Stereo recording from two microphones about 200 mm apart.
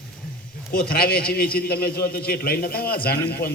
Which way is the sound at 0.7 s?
50° left (ahead or behind).